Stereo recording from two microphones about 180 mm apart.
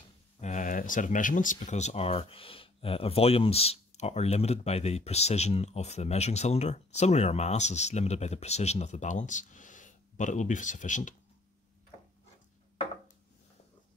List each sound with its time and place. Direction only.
0.4 s speech: 45° left (ahead or behind)